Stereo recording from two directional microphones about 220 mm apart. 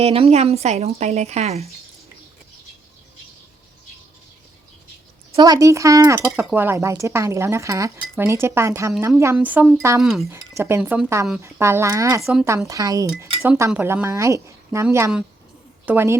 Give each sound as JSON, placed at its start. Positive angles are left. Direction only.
{"t": 0.0, "sound": "a woman's voice", "side_deg": -25}
{"t": 5.3, "sound": "speech", "side_deg": -20}
{"t": 10.2, "sound": "speech", "side_deg": -15}
{"t": 12.2, "sound": "speech", "side_deg": 0}
{"t": 12.5, "sound": "speech", "side_deg": -15}